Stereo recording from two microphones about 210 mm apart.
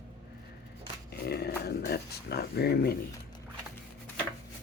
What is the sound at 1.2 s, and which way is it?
Speech, 50° left (ahead or behind).